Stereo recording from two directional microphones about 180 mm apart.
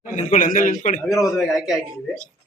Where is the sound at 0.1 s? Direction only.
45° left (ahead or behind).